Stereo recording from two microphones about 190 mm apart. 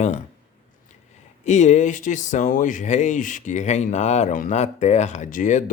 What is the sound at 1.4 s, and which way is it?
Speech, 40° left (ahead or behind).